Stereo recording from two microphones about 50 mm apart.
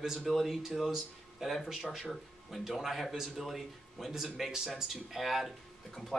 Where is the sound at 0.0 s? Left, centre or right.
Centre.